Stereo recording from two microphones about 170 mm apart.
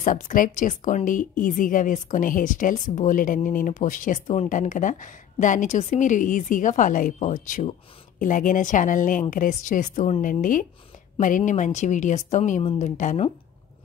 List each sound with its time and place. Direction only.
0.0 s a woman's voice: 50° left (ahead or behind)